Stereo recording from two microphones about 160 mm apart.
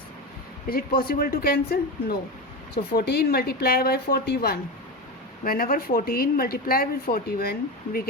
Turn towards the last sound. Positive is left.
turn(degrees=70)  # may be behind; listen again after turning